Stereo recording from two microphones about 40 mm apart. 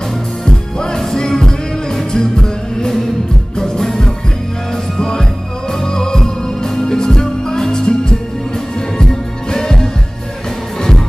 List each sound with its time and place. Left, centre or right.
0.5 s music: centre
6.7 s music: centre